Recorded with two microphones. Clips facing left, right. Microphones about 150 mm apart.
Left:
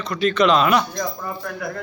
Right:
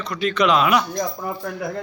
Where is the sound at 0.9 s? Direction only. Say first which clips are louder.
Right 1 dB; 20° right (ahead or behind).